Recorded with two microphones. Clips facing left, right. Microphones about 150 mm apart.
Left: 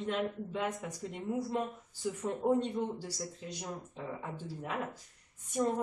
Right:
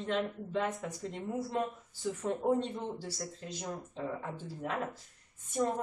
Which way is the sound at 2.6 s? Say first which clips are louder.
Left 2 dB; 15° left (ahead or behind).